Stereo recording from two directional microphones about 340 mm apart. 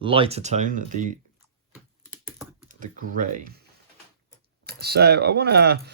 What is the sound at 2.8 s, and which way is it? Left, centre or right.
Speech, right.